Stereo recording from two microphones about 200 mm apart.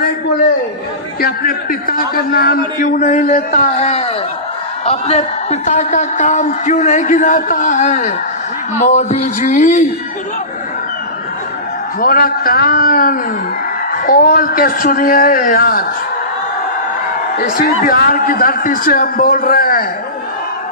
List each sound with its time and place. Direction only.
1.2 s a man's voice: 45° left (ahead or behind)
12.0 s a man's voice: 45° left (ahead or behind)
17.4 s a man's voice: 45° left (ahead or behind)